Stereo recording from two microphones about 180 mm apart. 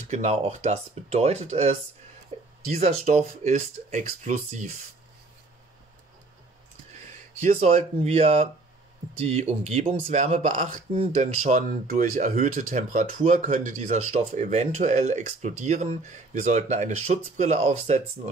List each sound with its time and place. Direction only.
0.1 s speech: 40° right (ahead or behind)
2.8 s speech: 40° right (ahead or behind)
7.4 s speech: 40° right (ahead or behind)